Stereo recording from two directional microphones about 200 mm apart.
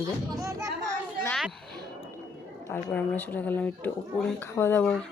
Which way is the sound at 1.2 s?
Centre (ahead or behind).